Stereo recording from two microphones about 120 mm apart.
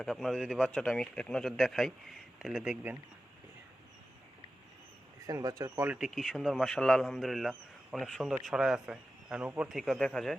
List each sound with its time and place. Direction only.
0.0 s speech: 5° left (ahead or behind)
5.2 s speech: 30° right (ahead or behind)
5.7 s speech: 15° right (ahead or behind)
6.0 s speech: centre (ahead or behind)